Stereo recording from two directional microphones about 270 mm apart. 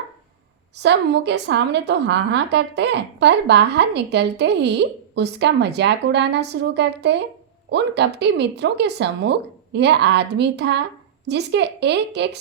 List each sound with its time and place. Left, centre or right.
0.8 s a woman's voice: right